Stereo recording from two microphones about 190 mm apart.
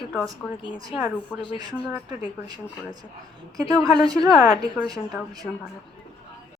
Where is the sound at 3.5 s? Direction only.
20° right (ahead or behind).